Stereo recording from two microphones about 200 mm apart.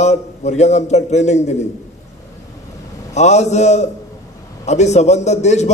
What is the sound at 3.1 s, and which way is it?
A man's voice, 35° left (ahead or behind).